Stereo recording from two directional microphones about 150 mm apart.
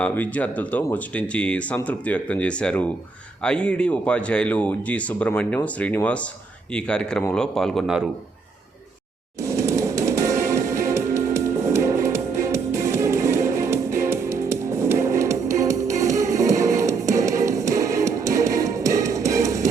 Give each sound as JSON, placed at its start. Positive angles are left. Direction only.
{"t": 0.0, "sound": "speech", "side_deg": 10}
{"t": 9.4, "sound": "music", "side_deg": -20}